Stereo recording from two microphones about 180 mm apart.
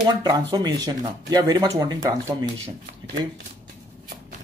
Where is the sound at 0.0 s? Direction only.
25° right (ahead or behind).